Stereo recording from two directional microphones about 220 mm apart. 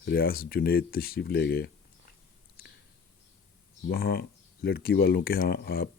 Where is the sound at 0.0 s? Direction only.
45° left (ahead or behind).